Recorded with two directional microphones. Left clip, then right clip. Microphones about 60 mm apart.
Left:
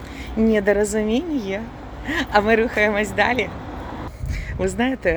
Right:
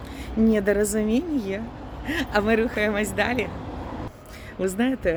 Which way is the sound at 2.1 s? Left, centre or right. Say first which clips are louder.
Left 5 dB; centre.